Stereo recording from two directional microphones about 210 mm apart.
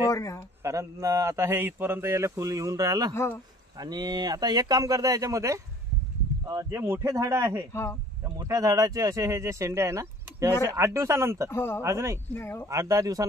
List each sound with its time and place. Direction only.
0.1 s speech: 15° left (ahead or behind)
0.7 s speech: 15° right (ahead or behind)
11.4 s speech: 10° left (ahead or behind)
11.8 s speech: 15° right (ahead or behind)
12.4 s speech: 10° left (ahead or behind)
12.6 s speech: 15° right (ahead or behind)